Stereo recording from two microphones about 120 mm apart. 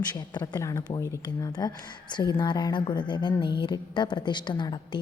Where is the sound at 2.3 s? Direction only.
40° left (ahead or behind).